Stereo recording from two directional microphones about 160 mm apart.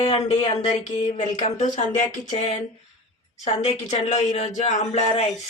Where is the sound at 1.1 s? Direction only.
45° left (ahead or behind).